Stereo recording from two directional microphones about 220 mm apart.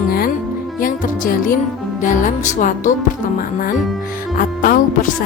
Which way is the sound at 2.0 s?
35° left (ahead or behind).